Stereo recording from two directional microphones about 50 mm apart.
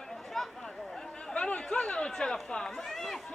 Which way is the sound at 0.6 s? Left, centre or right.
Centre.